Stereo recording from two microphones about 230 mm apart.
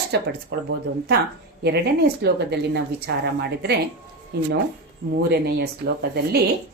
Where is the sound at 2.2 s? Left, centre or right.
Right.